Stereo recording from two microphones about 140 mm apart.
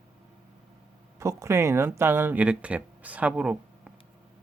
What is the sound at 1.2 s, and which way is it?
Speech, 20° right (ahead or behind).